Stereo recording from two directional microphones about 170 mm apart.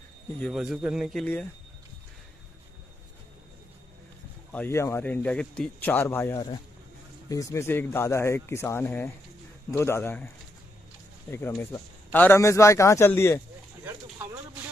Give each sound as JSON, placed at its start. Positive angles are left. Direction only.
{"t": 0.4, "sound": "a man's voice", "side_deg": 0}
{"t": 1.2, "sound": "speech", "side_deg": 10}
{"t": 4.5, "sound": "speech", "side_deg": 10}